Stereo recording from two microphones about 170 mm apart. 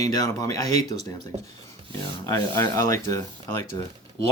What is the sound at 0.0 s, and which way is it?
Speech, 20° left (ahead or behind).